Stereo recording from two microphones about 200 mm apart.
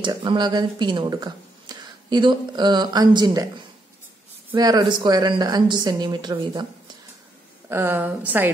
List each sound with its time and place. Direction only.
0.0 s speech: 20° right (ahead or behind)
4.6 s speech: 20° right (ahead or behind)
7.7 s a woman's voice: 10° right (ahead or behind)